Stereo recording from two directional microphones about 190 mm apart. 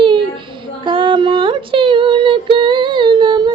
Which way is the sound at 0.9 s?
25° right (ahead or behind).